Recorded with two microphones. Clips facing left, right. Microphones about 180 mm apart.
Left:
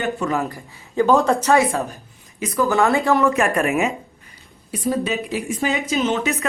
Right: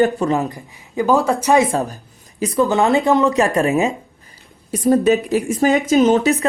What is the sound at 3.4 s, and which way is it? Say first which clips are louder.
Speech: right 3 dB; 30° right (ahead or behind).